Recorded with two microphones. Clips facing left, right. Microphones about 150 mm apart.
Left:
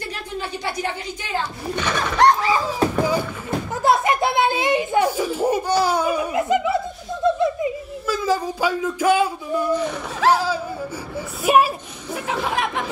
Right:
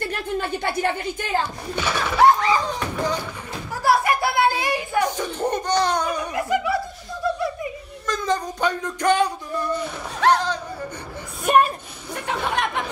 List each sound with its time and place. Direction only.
0.0 s a woman's voice: 55° right (ahead or behind)
1.8 s pigeon: 10° right (ahead or behind)
2.4 s a sound: 5° left (ahead or behind)
3.8 s children playing: 20° left (ahead or behind)
5.1 s laughter: 5° left (ahead or behind)
6.3 s snicker: 20° left (ahead or behind)
7.2 s laughter: 20° left (ahead or behind)
8.1 s a sound: 5° left (ahead or behind)